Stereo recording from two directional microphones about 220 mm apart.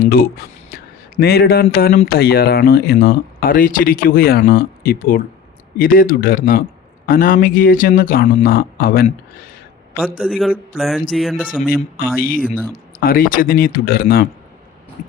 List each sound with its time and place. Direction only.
0.0 s speech: 45° left (ahead or behind)
10.0 s a man's voice: 5° right (ahead or behind)
11.6 s speech: 40° left (ahead or behind)